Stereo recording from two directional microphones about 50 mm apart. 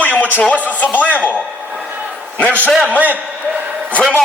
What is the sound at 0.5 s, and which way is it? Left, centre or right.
Speech, left.